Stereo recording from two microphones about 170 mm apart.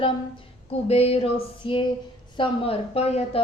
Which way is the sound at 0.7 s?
35° left (ahead or behind).